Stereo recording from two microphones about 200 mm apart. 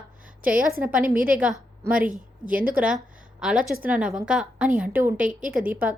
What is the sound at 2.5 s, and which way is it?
Speech, 45° right (ahead or behind).